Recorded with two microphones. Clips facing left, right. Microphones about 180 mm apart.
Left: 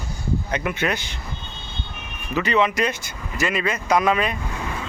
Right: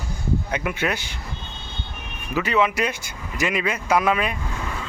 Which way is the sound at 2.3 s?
5° right (ahead or behind).